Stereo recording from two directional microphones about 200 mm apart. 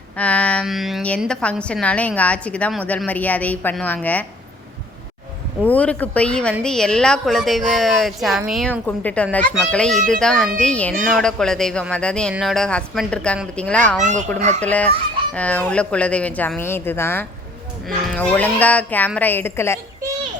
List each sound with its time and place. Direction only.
0.2 s a woman's voice: 5° left (ahead or behind)
5.6 s a woman's voice: 5° left (ahead or behind)
14.0 s speech: 35° right (ahead or behind)
14.6 s a woman's voice: 5° left (ahead or behind)